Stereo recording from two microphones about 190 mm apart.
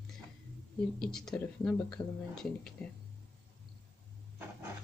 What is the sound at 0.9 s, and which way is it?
Speech, 5° left (ahead or behind).